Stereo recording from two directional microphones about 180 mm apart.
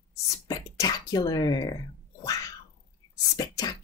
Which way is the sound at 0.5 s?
20° left (ahead or behind).